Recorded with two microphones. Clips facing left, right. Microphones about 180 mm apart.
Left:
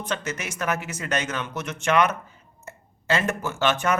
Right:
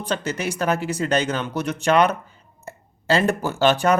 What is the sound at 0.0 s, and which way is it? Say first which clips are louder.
Speech: right 5 dB; 35° right (ahead or behind).